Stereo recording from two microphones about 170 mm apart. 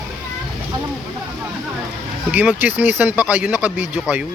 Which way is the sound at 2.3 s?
10° right (ahead or behind).